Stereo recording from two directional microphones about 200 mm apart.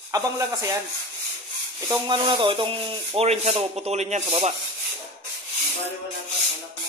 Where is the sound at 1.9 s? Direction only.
25° right (ahead or behind).